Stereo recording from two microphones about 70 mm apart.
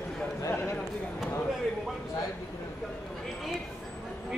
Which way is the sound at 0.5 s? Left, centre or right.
Left.